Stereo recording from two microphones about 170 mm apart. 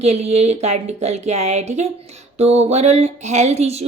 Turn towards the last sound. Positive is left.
turn(degrees=-40)  # may be behind; listen again after turning